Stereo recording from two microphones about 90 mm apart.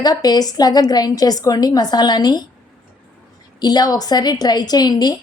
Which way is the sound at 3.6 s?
50° left (ahead or behind).